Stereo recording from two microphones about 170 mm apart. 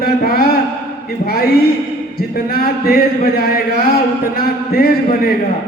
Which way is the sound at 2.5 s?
65° left (ahead or behind).